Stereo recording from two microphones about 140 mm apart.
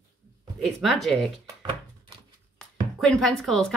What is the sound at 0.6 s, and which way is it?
Speech, centre (ahead or behind).